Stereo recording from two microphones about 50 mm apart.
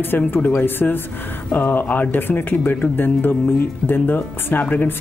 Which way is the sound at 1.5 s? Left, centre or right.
Left.